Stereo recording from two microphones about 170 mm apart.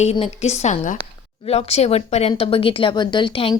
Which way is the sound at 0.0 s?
40° left (ahead or behind).